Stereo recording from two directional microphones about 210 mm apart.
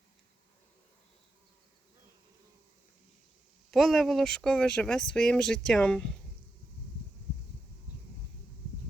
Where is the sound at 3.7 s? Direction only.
Centre (ahead or behind).